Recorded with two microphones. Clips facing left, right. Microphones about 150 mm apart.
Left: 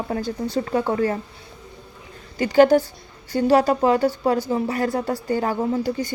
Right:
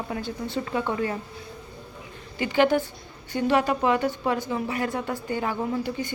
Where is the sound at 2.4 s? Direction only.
40° left (ahead or behind).